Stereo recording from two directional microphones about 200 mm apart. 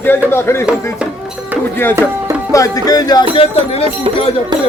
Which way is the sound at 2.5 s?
15° left (ahead or behind).